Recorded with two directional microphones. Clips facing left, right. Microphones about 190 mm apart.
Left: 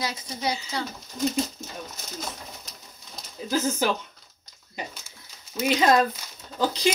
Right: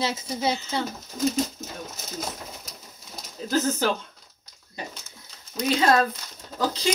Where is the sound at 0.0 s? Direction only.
25° right (ahead or behind).